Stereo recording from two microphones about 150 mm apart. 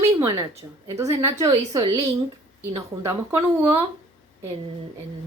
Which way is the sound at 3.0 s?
15° right (ahead or behind).